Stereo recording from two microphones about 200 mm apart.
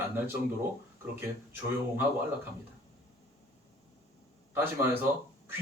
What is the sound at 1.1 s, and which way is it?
Speech, 10° right (ahead or behind).